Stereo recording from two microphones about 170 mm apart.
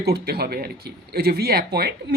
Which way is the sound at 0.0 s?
70° right (ahead or behind).